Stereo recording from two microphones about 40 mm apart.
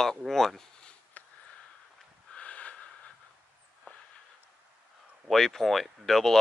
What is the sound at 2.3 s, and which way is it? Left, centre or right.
Snort, left.